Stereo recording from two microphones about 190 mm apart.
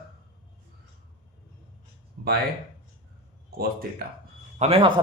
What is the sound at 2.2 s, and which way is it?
Speech, 55° right (ahead or behind).